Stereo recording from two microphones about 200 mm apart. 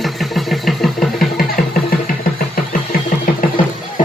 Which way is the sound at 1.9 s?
45° left (ahead or behind).